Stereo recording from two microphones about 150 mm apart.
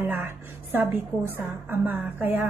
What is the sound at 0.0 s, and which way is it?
A woman's voice, 10° right (ahead or behind).